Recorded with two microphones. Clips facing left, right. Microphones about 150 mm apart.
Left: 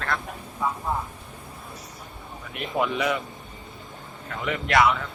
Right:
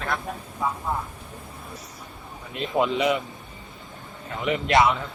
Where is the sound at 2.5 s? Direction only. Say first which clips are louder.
Right 3 dB; 25° right (ahead or behind).